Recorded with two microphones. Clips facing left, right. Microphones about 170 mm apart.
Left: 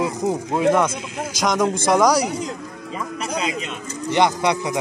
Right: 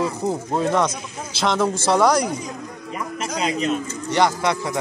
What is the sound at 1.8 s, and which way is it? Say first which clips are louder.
Speech: left 1 dB; 10° left (ahead or behind).